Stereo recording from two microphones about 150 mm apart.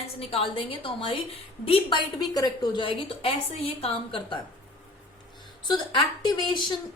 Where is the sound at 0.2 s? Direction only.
40° left (ahead or behind).